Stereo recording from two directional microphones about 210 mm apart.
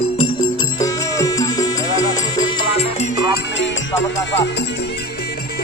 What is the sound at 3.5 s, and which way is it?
Speech, 60° left (ahead or behind).